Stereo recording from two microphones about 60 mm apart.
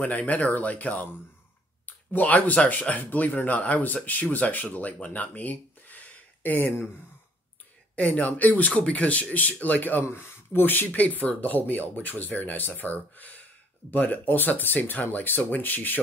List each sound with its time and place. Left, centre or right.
0.0 s speech: left
2.1 s speech: left
7.9 s speech: left
10.0 s speech: left